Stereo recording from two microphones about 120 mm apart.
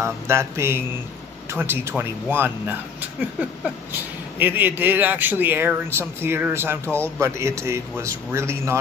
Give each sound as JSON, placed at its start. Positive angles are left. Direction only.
{"t": 0.0, "sound": "a man's voice", "side_deg": -20}